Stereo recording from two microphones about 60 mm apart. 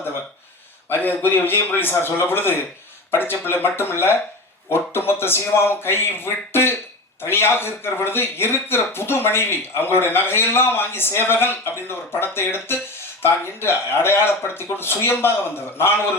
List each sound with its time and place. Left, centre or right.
0.9 s speech: left